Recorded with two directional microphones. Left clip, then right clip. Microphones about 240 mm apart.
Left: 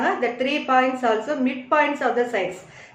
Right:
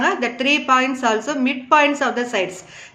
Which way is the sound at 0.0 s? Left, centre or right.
Right.